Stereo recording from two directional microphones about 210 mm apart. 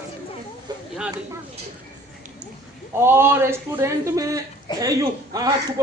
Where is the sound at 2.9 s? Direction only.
10° right (ahead or behind).